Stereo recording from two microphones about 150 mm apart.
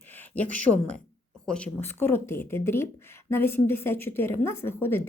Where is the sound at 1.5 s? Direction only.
5° left (ahead or behind).